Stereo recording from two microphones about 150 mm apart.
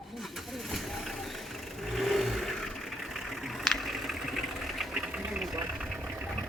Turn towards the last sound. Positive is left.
turn(degrees=-5)  # may be behind; listen again after turning